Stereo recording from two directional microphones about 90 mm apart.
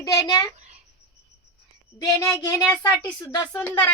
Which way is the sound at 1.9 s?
40° left (ahead or behind).